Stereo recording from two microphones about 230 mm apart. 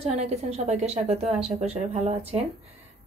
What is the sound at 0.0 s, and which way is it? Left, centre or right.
Speech, right.